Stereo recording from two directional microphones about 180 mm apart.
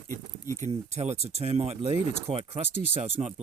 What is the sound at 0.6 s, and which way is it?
Speech, 35° right (ahead or behind).